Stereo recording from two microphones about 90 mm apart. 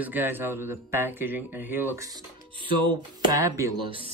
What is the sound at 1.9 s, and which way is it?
Speech, 40° right (ahead or behind).